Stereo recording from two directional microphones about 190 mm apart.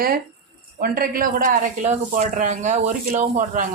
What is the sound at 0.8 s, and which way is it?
Speech, 50° right (ahead or behind).